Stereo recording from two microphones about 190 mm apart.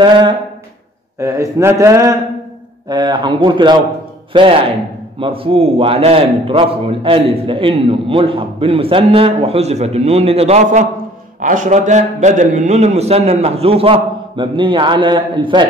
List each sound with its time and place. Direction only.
0.0 s a man's voice: 25° right (ahead or behind)